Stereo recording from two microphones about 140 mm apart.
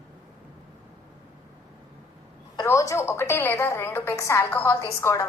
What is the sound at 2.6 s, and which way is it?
A woman's voice, 20° left (ahead or behind).